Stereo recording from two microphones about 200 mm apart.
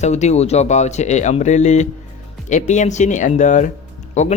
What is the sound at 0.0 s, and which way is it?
A man's voice, 35° left (ahead or behind).